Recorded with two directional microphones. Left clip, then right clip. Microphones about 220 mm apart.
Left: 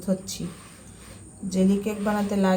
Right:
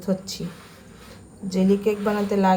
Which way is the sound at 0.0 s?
5° right (ahead or behind).